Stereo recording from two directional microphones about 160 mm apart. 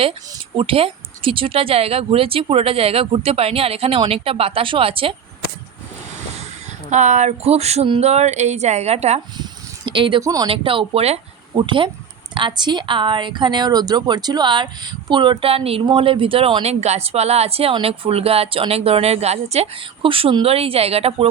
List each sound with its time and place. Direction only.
0.0 s speech: 35° right (ahead or behind)
6.9 s speech: 45° right (ahead or behind)
9.4 s a sound: 30° right (ahead or behind)
10.5 s speech: 35° right (ahead or behind)